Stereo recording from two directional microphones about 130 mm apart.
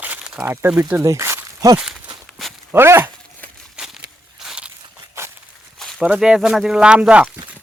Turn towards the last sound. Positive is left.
turn(degrees=-10)  # may be behind; listen again after turning